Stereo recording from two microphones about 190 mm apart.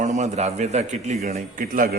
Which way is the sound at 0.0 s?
35° right (ahead or behind).